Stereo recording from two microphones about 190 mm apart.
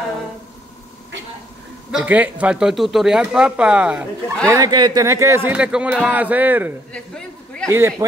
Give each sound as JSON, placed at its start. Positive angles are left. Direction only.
{"t": 1.9, "sound": "speech", "side_deg": -5}
{"t": 4.5, "sound": "speech", "side_deg": -20}
{"t": 6.9, "sound": "a man's voice", "side_deg": 5}
{"t": 7.6, "sound": "speech", "side_deg": -10}